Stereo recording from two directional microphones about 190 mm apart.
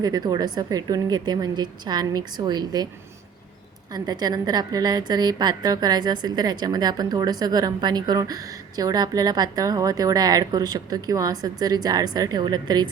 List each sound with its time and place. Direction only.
0.0 s a woman's voice: 20° right (ahead or behind)
3.9 s a woman's voice: 20° right (ahead or behind)